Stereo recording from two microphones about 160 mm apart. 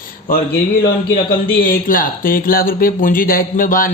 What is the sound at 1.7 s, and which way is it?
Speech, 60° left (ahead or behind).